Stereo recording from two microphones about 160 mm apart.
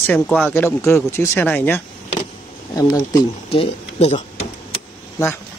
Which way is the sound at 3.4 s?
40° left (ahead or behind).